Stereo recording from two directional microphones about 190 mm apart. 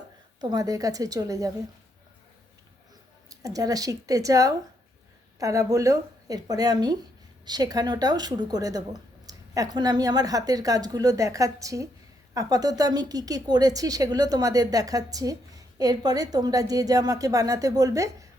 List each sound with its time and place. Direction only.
0.3 s a woman's voice: 20° right (ahead or behind)
3.2 s a woman's voice: 20° right (ahead or behind)